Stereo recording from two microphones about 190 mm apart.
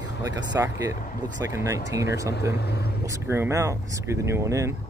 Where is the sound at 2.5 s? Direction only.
60° left (ahead or behind).